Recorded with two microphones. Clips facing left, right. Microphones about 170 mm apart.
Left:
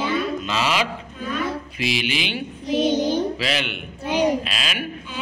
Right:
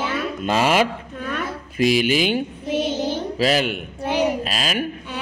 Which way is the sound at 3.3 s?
40° right (ahead or behind).